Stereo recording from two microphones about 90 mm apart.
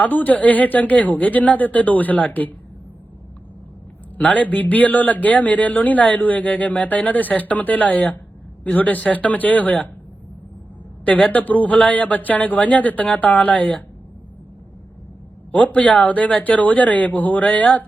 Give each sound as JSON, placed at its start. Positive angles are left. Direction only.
{"t": 0.0, "sound": "speech", "side_deg": 20}
{"t": 4.2, "sound": "speech", "side_deg": 15}
{"t": 11.0, "sound": "speech", "side_deg": 15}
{"t": 15.5, "sound": "speech", "side_deg": 15}